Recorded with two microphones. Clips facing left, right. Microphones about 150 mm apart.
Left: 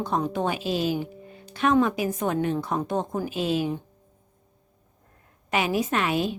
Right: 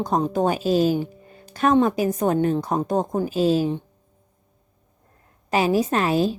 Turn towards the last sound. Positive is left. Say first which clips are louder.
# right 4 dB
turn(degrees=-35)  # may be behind; listen again after turning